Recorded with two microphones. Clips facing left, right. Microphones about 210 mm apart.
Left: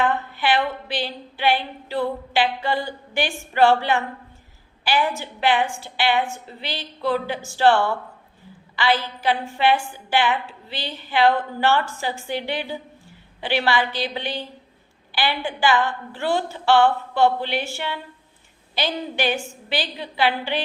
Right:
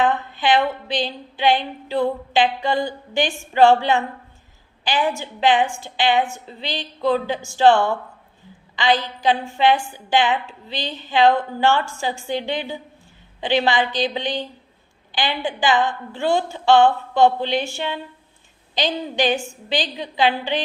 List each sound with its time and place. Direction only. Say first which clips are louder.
0.0 s a woman's voice: right 2 dB; 20° right (ahead or behind)